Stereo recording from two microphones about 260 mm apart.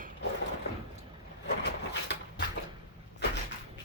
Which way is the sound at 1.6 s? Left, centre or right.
Left.